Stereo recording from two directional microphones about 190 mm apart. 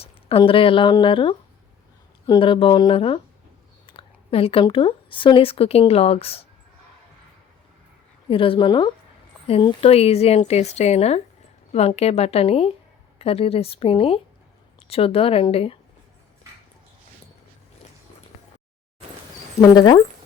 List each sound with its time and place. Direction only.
0.0 s speech: 30° left (ahead or behind)
8.3 s a woman's voice: 30° left (ahead or behind)
19.6 s speech: 20° left (ahead or behind)